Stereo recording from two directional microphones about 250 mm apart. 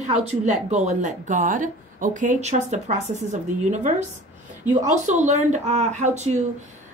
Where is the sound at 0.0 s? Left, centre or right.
Right.